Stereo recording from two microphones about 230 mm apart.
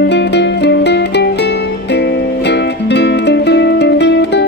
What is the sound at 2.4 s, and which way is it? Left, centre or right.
Music, left.